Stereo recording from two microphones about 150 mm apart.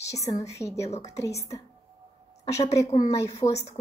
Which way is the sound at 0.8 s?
45° left (ahead or behind).